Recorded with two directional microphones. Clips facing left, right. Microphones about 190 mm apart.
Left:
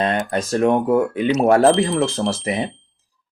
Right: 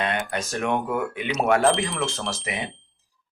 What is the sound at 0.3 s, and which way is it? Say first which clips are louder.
Speech: left 8 dB; 35° left (ahead or behind).